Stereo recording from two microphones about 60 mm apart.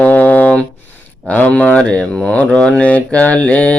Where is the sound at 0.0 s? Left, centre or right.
Left.